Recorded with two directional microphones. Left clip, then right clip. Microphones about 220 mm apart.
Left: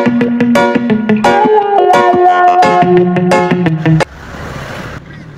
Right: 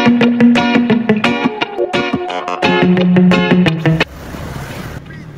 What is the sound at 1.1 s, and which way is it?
Music, centre (ahead or behind).